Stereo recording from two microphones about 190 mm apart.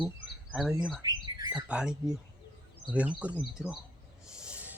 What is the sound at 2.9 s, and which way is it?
Speech, 5° right (ahead or behind).